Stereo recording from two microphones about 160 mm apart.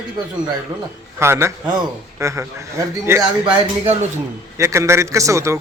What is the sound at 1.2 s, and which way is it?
A man's voice, 15° right (ahead or behind).